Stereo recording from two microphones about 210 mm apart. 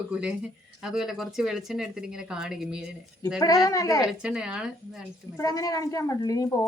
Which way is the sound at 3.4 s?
15° left (ahead or behind).